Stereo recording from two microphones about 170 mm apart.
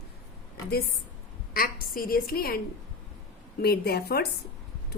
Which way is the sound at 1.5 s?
60° left (ahead or behind).